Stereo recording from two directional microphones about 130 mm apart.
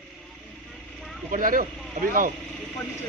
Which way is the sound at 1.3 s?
90° right.